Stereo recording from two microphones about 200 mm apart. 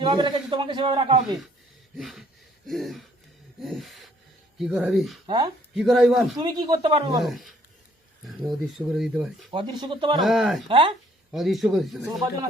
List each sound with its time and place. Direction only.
0.0 s a man's voice: 20° right (ahead or behind)
2.0 s speech: centre (ahead or behind)
5.2 s speech: 25° right (ahead or behind)
5.7 s speech: centre (ahead or behind)
6.3 s a man's voice: 20° right (ahead or behind)
7.2 s speech: centre (ahead or behind)
9.5 s a man's voice: 25° right (ahead or behind)
10.2 s speech: centre (ahead or behind)
10.7 s a man's voice: 25° right (ahead or behind)
11.3 s speech: centre (ahead or behind)